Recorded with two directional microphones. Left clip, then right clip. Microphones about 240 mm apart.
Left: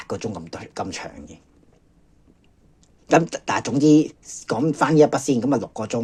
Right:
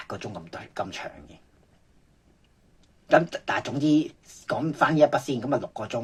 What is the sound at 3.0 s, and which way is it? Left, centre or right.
Speech, left.